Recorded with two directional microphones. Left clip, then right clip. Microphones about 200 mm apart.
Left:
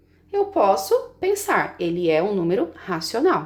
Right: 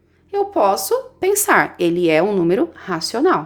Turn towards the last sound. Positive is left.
turn(degrees=-20)  # may be behind; listen again after turning